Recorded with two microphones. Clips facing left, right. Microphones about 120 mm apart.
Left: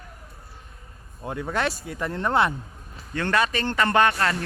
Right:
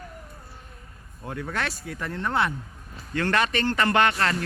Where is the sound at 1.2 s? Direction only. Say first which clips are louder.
Left 4 dB; 15° left (ahead or behind).